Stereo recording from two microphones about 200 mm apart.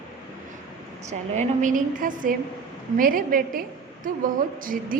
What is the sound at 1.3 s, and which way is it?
A woman's voice, 40° right (ahead or behind).